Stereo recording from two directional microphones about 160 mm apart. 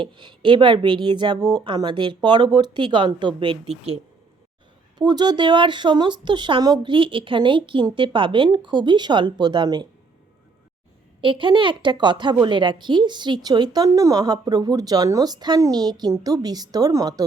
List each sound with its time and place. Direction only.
0.0 s a woman's voice: 30° right (ahead or behind)
4.9 s a woman's voice: 25° right (ahead or behind)
11.2 s a woman's voice: 30° right (ahead or behind)